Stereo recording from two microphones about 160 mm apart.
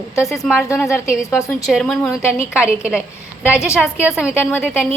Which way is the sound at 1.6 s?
Centre (ahead or behind).